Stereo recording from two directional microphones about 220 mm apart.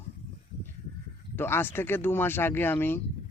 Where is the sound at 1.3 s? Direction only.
10° left (ahead or behind).